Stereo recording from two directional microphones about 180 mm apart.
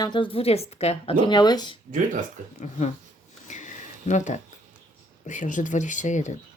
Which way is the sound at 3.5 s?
45° left (ahead or behind).